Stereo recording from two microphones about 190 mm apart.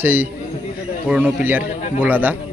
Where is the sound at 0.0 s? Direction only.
10° right (ahead or behind).